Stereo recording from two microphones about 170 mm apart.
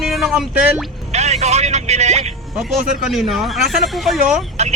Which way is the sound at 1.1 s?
40° right (ahead or behind).